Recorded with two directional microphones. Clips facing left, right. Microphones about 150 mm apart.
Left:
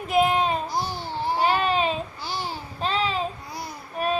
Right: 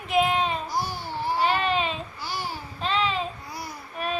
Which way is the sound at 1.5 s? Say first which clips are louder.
Left 2 dB; 40° left (ahead or behind).